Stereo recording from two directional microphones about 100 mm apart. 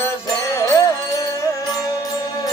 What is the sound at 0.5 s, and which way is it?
Music, 35° left (ahead or behind).